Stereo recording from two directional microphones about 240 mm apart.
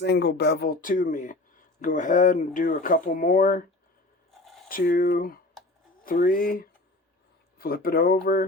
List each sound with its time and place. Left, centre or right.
0.0 s speech: left
4.3 s a sound: centre
4.7 s speech: left